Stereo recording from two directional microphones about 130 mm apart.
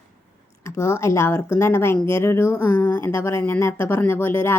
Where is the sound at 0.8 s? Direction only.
20° left (ahead or behind).